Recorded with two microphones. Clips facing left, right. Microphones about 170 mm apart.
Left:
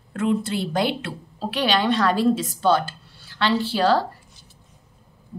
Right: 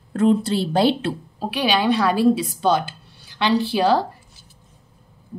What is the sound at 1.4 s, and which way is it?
A woman's voice, 10° right (ahead or behind).